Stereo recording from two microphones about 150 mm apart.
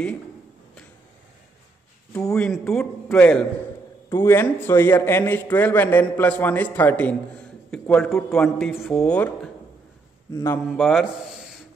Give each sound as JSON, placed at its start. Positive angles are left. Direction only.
{"t": 2.3, "sound": "a man's voice", "side_deg": 5}
{"t": 10.8, "sound": "a man's voice", "side_deg": 0}